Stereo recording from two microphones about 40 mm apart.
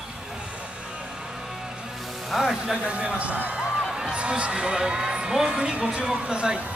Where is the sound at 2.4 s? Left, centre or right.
Centre.